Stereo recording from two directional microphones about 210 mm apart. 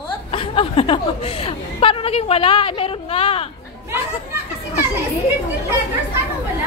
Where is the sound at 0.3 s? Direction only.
25° left (ahead or behind).